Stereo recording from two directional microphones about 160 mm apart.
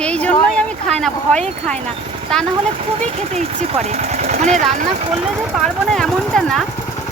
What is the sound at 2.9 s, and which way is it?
Speech, 45° right (ahead or behind).